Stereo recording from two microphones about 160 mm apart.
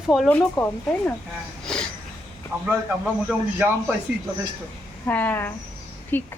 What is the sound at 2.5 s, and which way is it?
A man's voice, 15° right (ahead or behind).